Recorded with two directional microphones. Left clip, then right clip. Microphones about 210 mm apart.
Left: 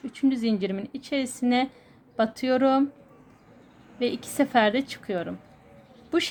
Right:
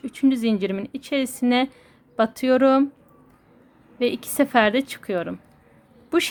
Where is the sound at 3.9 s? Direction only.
20° right (ahead or behind).